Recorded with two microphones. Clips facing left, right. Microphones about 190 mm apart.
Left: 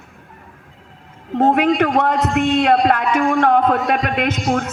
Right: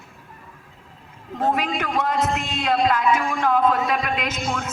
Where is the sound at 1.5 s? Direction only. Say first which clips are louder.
Left 9 dB; 65° left (ahead or behind).